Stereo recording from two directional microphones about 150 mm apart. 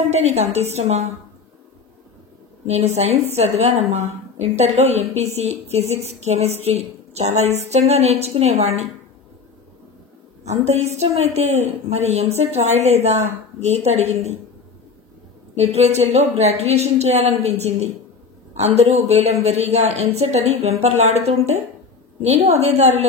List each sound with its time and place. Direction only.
0.1 s speech: 45° right (ahead or behind)
2.6 s speech: 45° right (ahead or behind)
10.4 s speech: 45° right (ahead or behind)
15.5 s speech: 45° right (ahead or behind)